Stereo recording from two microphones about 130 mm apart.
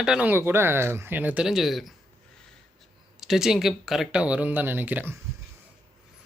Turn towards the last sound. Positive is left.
turn(degrees=-15)  # may be behind; listen again after turning